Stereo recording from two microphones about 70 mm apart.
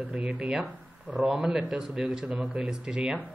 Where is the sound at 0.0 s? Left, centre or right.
Centre.